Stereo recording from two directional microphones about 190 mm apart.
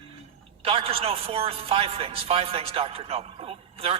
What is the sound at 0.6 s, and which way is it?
A man's voice, 30° right (ahead or behind).